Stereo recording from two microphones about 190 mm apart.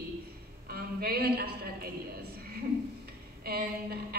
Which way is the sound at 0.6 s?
55° right (ahead or behind).